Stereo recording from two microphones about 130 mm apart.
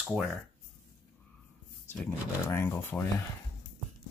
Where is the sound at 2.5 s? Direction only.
20° left (ahead or behind).